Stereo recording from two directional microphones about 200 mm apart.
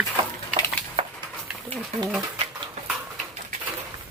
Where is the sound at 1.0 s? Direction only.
25° right (ahead or behind).